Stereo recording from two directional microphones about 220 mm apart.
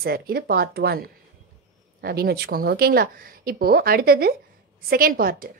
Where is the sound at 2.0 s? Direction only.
45° right (ahead or behind).